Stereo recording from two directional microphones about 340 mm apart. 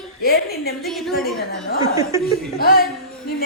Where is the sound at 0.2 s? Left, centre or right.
Left.